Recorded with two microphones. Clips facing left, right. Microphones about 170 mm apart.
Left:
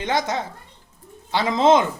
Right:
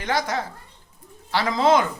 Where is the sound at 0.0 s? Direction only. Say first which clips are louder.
Left 2 dB; 20° left (ahead or behind).